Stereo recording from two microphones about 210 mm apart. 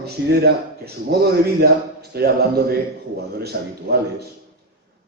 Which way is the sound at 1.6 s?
50° right (ahead or behind).